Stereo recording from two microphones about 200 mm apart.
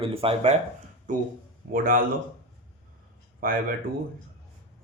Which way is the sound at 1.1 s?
40° right (ahead or behind).